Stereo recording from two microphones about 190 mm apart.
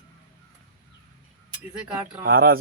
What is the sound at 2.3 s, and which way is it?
Speech, 50° right (ahead or behind).